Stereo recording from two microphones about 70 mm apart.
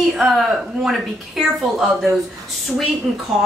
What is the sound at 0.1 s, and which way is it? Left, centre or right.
A woman's voice, centre.